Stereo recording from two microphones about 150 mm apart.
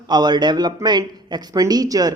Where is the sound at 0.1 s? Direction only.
30° right (ahead or behind).